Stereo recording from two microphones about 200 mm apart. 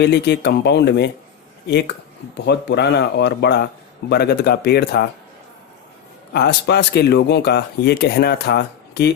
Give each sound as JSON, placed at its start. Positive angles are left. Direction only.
{"t": 0.0, "sound": "speech", "side_deg": 55}
{"t": 2.5, "sound": "speech", "side_deg": 60}
{"t": 6.3, "sound": "speech", "side_deg": 55}